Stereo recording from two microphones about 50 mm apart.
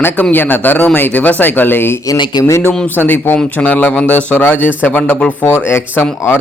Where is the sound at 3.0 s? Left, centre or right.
Left.